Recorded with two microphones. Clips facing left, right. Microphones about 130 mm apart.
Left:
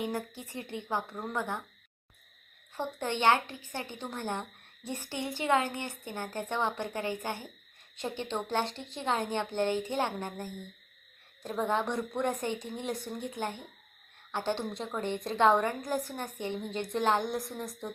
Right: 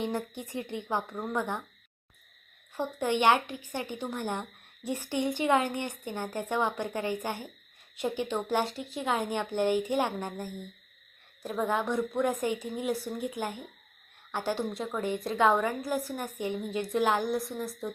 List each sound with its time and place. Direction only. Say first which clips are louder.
0.0 s a woman's voice: right 2 dB; 20° right (ahead or behind)
2.7 s a woman's voice: right 4 dB; 10° right (ahead or behind)
11.4 s a woman's voice: right 1 dB; 5° right (ahead or behind)